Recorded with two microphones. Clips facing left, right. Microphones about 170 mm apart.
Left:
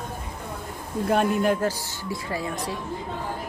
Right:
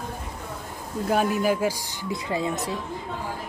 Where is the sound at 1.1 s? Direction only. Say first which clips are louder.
Left 1 dB; centre (ahead or behind); by 2.7 s 25° right (ahead or behind).